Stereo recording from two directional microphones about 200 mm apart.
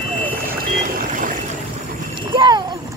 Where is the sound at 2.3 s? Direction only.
25° right (ahead or behind).